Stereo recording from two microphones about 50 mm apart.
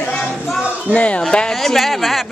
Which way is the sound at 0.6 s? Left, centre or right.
Right.